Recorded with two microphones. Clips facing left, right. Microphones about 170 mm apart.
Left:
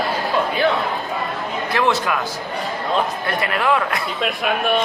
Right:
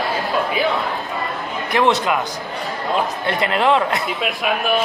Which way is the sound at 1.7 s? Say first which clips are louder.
Right 3 dB; 20° right (ahead or behind).